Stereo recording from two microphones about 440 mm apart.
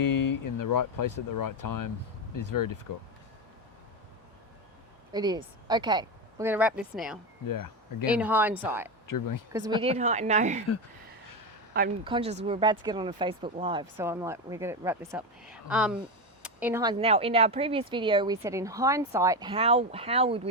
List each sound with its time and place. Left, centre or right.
0.0 s speech: left
5.1 s speech: centre
7.4 s speech: left
8.0 s speech: centre
9.0 s speech: left
9.5 s speech: centre
11.7 s speech: centre